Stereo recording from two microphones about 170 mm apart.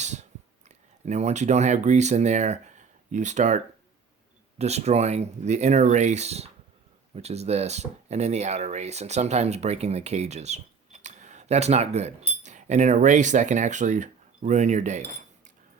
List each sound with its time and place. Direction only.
0.0 s clicking: 45° right (ahead or behind)
1.0 s speech: 40° right (ahead or behind)